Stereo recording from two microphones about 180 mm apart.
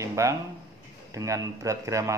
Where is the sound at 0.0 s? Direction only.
15° right (ahead or behind).